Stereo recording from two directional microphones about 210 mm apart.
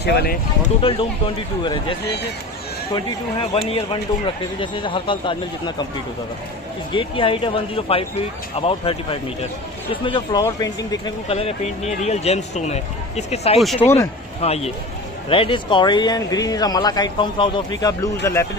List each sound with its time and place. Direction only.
0.0 s speech: 50° left (ahead or behind)
0.8 s speech: 25° left (ahead or behind)
3.5 s speech: 25° left (ahead or behind)
6.9 s speech: 25° left (ahead or behind)
13.6 s speech: centre (ahead or behind)
13.8 s speech: 10° left (ahead or behind)
14.4 s speech: 30° left (ahead or behind)